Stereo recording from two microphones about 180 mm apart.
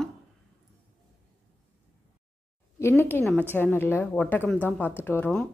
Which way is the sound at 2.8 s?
10° left (ahead or behind).